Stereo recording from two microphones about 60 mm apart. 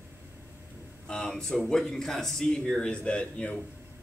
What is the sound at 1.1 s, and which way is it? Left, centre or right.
Speech, centre.